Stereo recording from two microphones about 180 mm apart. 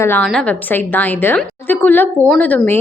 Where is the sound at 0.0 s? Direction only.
10° left (ahead or behind).